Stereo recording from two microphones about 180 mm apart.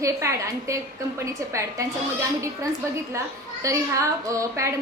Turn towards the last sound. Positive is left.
turn(degrees=-15)  # may be behind; listen again after turning